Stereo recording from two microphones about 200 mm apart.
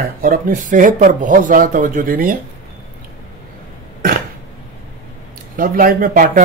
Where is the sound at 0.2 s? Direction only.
40° right (ahead or behind).